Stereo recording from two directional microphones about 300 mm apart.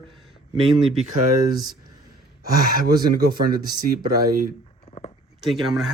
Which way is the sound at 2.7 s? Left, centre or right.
Right.